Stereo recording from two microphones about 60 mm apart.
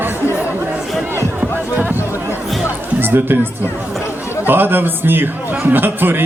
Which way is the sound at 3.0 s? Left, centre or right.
Right.